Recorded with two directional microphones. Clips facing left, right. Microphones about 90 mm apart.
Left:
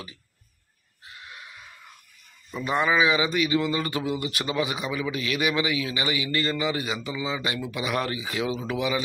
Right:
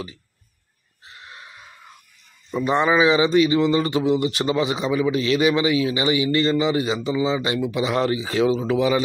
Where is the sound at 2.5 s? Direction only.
25° right (ahead or behind).